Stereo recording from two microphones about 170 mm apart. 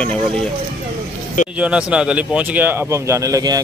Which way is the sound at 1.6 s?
5° right (ahead or behind).